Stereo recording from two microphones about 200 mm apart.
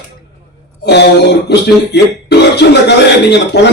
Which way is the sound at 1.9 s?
55° left (ahead or behind).